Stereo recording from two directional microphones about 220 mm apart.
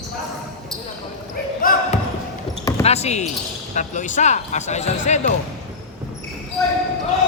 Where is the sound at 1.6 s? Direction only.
40° left (ahead or behind).